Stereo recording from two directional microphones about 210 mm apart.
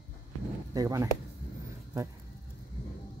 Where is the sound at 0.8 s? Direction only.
15° right (ahead or behind).